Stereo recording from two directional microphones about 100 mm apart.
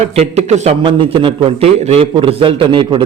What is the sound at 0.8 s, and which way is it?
A man's voice, 60° right (ahead or behind).